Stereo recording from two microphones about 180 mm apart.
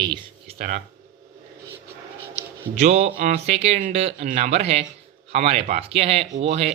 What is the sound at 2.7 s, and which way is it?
Speech, 40° right (ahead or behind).